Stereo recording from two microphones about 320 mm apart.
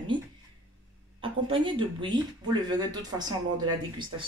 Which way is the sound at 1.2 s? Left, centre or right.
Centre.